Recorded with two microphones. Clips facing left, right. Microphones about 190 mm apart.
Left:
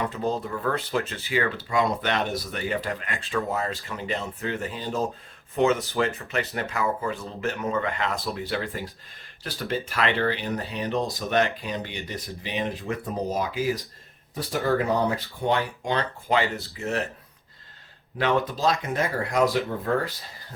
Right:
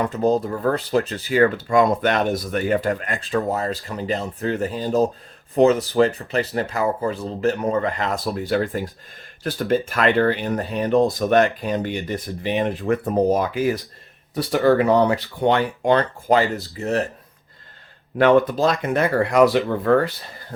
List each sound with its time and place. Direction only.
0.0 s speech: 45° right (ahead or behind)
14.3 s speech: 70° right (ahead or behind); by 17.1 s 40° right (ahead or behind)
18.2 s speech: 55° right (ahead or behind); by 20.1 s 70° right (ahead or behind)